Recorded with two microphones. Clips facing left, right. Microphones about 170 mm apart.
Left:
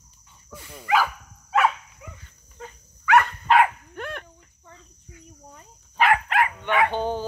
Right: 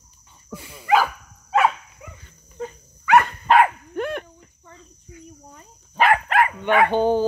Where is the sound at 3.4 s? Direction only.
45° right (ahead or behind).